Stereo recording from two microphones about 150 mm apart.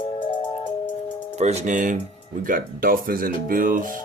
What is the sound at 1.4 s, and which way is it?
Speech, 50° right (ahead or behind).